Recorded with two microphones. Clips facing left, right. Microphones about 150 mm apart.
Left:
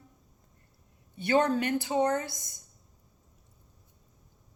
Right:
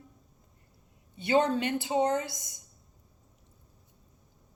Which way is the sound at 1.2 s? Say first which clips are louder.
Even; 25° right (ahead or behind).